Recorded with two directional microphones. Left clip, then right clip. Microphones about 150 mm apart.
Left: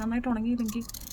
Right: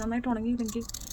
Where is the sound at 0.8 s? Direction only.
15° right (ahead or behind).